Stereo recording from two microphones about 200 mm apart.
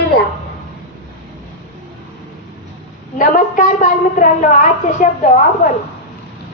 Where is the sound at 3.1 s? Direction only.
40° left (ahead or behind).